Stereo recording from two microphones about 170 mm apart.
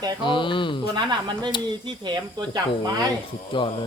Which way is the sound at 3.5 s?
30° left (ahead or behind).